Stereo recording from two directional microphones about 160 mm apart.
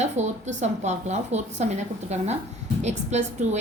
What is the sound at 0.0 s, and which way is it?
A woman's voice, 45° right (ahead or behind).